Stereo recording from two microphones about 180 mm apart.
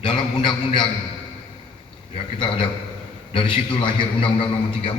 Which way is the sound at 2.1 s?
30° left (ahead or behind).